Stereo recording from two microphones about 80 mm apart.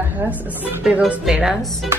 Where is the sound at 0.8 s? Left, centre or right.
Centre.